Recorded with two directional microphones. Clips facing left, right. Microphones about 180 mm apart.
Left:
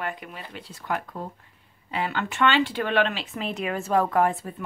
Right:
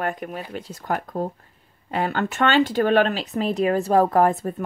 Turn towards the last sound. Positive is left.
turn(degrees=-45)  # may be behind; listen again after turning